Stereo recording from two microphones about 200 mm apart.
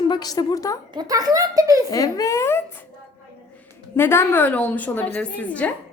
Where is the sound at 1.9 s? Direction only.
15° left (ahead or behind).